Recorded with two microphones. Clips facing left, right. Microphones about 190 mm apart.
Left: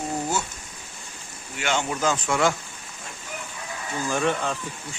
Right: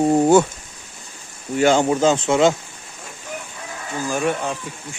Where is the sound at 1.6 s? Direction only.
35° right (ahead or behind); by 2.5 s 20° right (ahead or behind).